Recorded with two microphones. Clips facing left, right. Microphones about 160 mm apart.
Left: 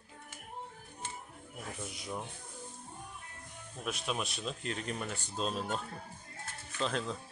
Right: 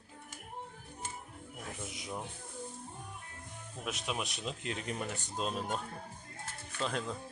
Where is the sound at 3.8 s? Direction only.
20° right (ahead or behind).